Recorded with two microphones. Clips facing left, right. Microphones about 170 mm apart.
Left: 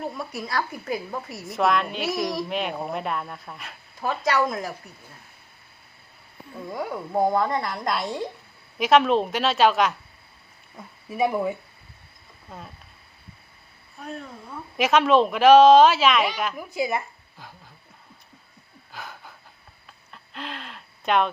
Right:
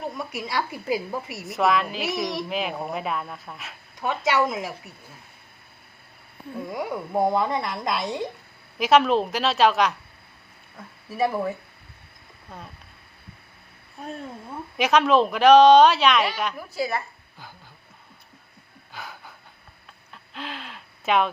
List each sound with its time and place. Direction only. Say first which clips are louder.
0.0 s a woman's voice: even; centre (ahead or behind)
6.7 s a woman's voice: even; centre (ahead or behind)
11.2 s speech: left 1 dB; 15° left (ahead or behind)
12.5 s a woman's voice: even; centre (ahead or behind)
14.8 s a woman's voice: even; centre (ahead or behind)
16.7 s speech: left 2 dB; 20° left (ahead or behind)
18.9 s a sound: even; centre (ahead or behind)
20.1 s gasp: even; centre (ahead or behind)